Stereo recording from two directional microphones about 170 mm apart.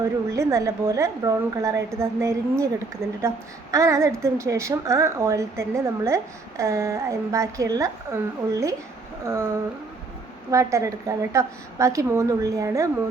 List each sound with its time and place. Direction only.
0.0 s a woman's voice: 20° right (ahead or behind)
10.5 s a woman's voice: 20° right (ahead or behind)